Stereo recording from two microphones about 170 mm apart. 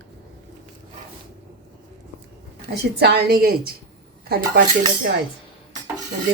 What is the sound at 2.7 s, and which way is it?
A woman's voice, 75° right (ahead or behind).